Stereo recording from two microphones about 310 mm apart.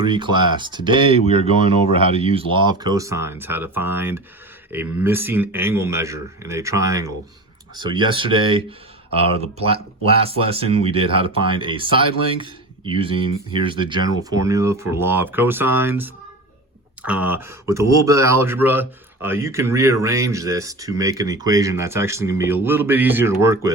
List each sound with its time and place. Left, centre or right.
0.0 s speech: centre